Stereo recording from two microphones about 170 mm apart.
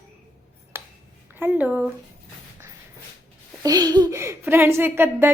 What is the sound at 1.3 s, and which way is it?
Speech, 10° right (ahead or behind).